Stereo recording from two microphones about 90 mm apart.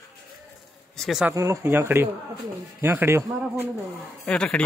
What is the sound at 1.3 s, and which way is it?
Speech, 30° right (ahead or behind).